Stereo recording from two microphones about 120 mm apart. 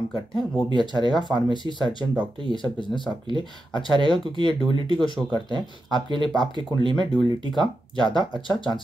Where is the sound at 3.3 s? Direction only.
40° right (ahead or behind).